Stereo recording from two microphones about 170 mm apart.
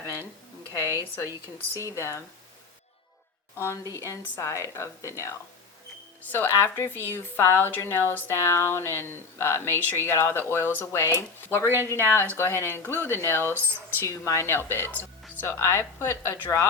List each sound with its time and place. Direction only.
0.7 s a woman's voice: 20° left (ahead or behind)
3.9 s speech: 15° left (ahead or behind)
13.4 s speech: 15° right (ahead or behind)
13.9 s speech: 15° left (ahead or behind)